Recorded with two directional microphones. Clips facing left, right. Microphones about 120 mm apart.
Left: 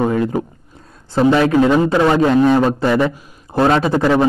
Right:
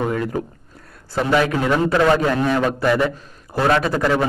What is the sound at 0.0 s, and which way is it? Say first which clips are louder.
A man's voice: left 5 dB; 25° left (ahead or behind).